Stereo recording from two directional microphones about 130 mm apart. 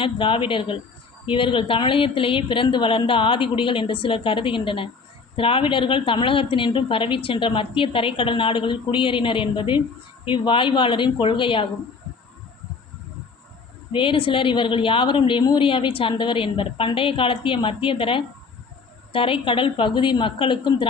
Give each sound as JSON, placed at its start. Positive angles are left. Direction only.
{"t": 0.0, "sound": "a woman's voice", "side_deg": 40}
{"t": 13.9, "sound": "a woman's voice", "side_deg": 40}